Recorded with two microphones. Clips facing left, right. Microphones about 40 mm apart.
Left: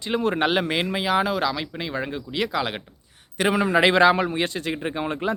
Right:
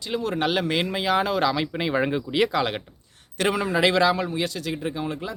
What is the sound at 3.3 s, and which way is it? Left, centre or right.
Speech, centre.